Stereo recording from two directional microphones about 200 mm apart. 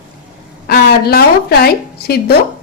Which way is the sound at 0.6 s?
50° left (ahead or behind).